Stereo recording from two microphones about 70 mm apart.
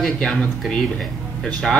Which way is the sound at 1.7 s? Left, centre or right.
Centre.